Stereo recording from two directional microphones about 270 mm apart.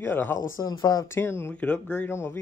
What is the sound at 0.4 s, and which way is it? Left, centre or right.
Speech, left.